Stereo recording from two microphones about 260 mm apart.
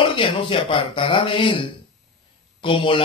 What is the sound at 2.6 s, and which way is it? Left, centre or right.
Speech, centre.